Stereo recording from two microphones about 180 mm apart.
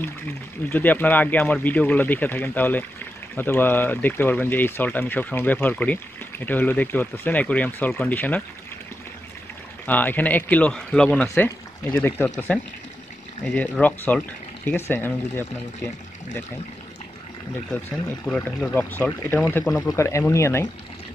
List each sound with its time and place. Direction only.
0.7 s speech: 10° left (ahead or behind)
9.8 s speech: 10° left (ahead or behind)
18.2 s speech: 5° left (ahead or behind)